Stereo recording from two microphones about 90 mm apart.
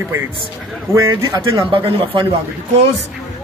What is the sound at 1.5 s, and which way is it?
Speech, 75° right (ahead or behind).